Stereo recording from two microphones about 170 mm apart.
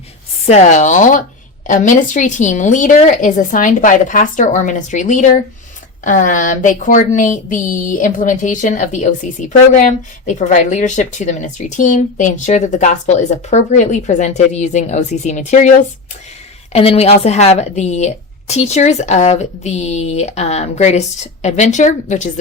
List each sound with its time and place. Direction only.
0.4 s speech: 40° left (ahead or behind)
16.7 s a woman's voice: 35° left (ahead or behind)